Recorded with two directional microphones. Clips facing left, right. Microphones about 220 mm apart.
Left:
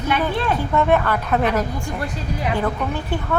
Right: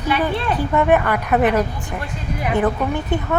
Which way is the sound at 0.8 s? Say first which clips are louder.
Right 2 dB; 15° right (ahead or behind).